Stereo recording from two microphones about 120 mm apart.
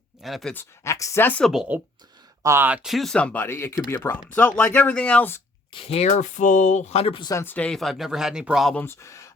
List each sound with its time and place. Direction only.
0.2 s speech: centre (ahead or behind)
0.5 s speech: 20° left (ahead or behind)
1.7 s speech: 15° right (ahead or behind)
2.6 s speech: 5° right (ahead or behind); by 5.4 s 15° left (ahead or behind)
5.7 s speech: 55° left (ahead or behind)
7.3 s speech: 15° left (ahead or behind); by 8.7 s 5° right (ahead or behind)
8.7 s speech: 20° left (ahead or behind)